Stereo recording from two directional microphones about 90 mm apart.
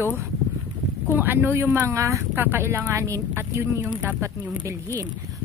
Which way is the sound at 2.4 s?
25° right (ahead or behind).